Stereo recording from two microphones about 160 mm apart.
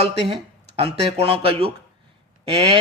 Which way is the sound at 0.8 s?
35° right (ahead or behind).